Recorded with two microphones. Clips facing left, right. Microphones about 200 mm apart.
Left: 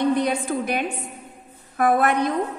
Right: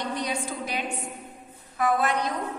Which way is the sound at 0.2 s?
55° left (ahead or behind).